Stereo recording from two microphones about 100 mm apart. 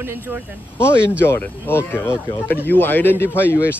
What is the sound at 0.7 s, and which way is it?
Speech, 25° left (ahead or behind).